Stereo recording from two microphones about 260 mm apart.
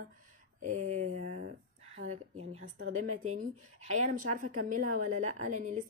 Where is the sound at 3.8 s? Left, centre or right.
Right.